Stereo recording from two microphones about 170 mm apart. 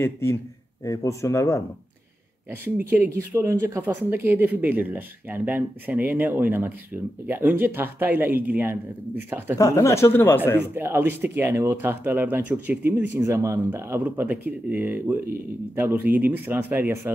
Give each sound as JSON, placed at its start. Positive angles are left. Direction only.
{"t": 0.0, "sound": "speech", "side_deg": 15}
{"t": 2.6, "sound": "speech", "side_deg": -10}
{"t": 9.6, "sound": "speech", "side_deg": 20}
{"t": 10.7, "sound": "speech", "side_deg": -15}